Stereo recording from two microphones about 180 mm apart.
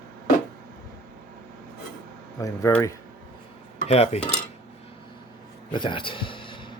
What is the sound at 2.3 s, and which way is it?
Speech, 15° left (ahead or behind).